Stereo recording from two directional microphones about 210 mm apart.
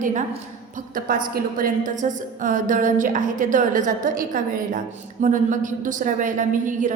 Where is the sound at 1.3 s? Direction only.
40° right (ahead or behind).